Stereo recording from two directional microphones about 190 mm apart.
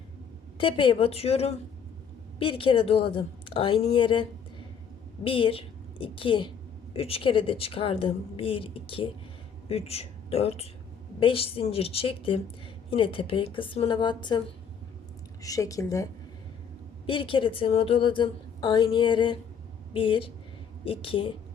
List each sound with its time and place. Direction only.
0.6 s a woman's voice: 25° left (ahead or behind)
15.4 s speech: 15° left (ahead or behind)
17.1 s a woman's voice: 25° left (ahead or behind)